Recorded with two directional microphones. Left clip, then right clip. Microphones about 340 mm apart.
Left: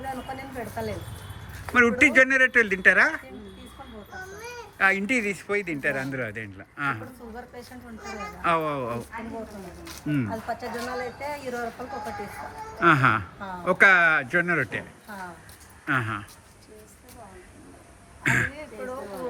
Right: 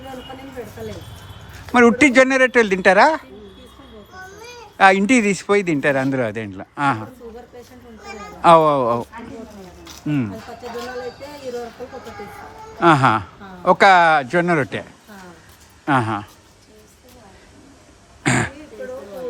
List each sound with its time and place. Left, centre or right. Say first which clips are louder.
1.7 s a woman's voice: right 6 dB; centre
4.8 s a woman's voice: right 9 dB; centre
5.9 s speech: right 11 dB; right
6.2 s a woman's voice: right 9 dB; centre
8.0 s a woman's voice: right 12 dB; centre
10.0 s a woman's voice: right 5 dB; centre
12.8 s a woman's voice: right 6 dB; centre
15.9 s a woman's voice: right 8 dB; centre
18.2 s throat clearing: right 3 dB; centre